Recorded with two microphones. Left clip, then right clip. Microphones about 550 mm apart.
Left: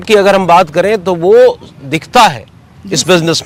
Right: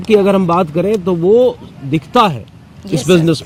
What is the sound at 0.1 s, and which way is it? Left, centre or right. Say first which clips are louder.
Speech: left 5 dB; left.